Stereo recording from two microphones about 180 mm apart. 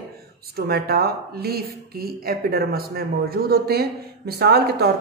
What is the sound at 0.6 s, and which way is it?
Speech, 60° right (ahead or behind).